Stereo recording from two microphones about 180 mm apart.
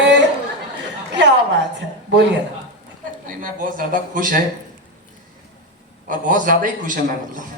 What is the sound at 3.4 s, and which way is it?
Speech, 50° right (ahead or behind).